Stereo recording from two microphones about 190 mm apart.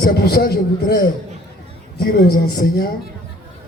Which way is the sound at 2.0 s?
55° left (ahead or behind).